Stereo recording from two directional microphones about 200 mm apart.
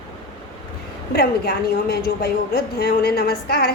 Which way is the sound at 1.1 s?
55° left (ahead or behind).